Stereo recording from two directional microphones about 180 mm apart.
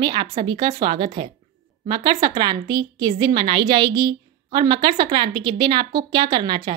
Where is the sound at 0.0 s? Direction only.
25° right (ahead or behind).